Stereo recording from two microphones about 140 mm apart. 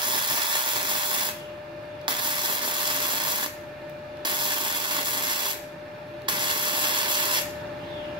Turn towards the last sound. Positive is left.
turn(degrees=-35)  # may be behind; listen again after turning